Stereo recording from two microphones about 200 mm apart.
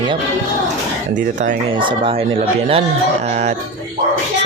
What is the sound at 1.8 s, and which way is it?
Speech, 25° right (ahead or behind).